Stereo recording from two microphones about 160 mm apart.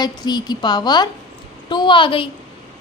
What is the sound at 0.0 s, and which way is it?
A woman's voice, 25° left (ahead or behind).